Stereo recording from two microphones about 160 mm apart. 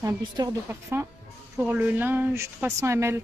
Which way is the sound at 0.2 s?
25° right (ahead or behind).